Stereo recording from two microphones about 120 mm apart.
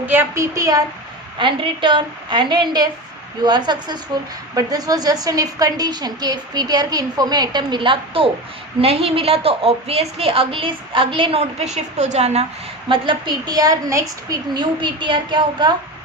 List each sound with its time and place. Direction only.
0.0 s a woman's voice: 15° right (ahead or behind)
1.4 s a woman's voice: 40° right (ahead or behind); by 12.5 s 65° right (ahead or behind)
12.9 s a woman's voice: 40° right (ahead or behind)
14.5 s a woman's voice: 40° right (ahead or behind)